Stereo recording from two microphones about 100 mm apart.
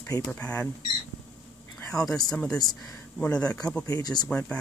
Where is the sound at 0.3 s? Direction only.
15° left (ahead or behind).